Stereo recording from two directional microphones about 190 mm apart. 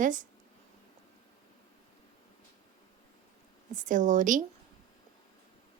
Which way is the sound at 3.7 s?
40° right (ahead or behind).